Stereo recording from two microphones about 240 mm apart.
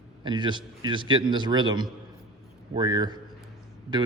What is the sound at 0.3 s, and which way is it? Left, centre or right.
A man's voice, centre.